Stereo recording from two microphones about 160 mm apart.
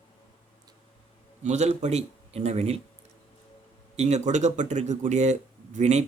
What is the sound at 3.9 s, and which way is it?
Speech, 45° right (ahead or behind).